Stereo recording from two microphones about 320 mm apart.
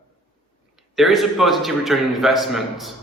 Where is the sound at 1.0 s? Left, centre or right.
Centre.